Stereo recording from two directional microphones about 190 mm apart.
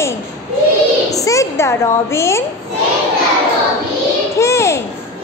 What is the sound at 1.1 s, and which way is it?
A woman's voice, 15° left (ahead or behind).